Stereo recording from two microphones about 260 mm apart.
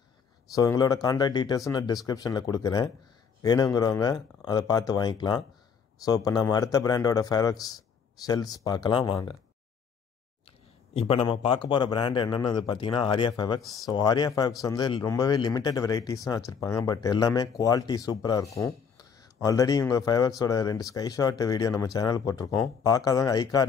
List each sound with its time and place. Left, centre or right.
0.5 s speech: centre
10.9 s speech: left